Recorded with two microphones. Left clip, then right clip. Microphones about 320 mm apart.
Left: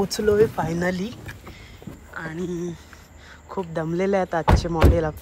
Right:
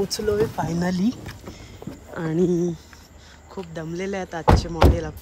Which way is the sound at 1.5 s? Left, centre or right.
Right.